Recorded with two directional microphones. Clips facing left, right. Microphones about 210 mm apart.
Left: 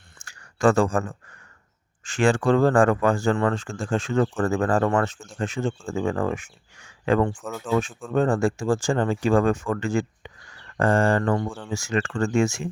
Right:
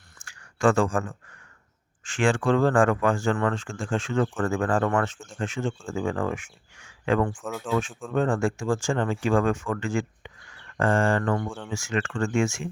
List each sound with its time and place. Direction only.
0.3 s a sound: 40° left (ahead or behind)
2.0 s speech: 40° left (ahead or behind)
7.3 s speech: centre (ahead or behind)
8.1 s speech: 35° left (ahead or behind)